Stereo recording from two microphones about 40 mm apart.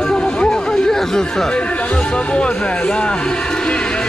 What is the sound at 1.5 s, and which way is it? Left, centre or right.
Speech, left.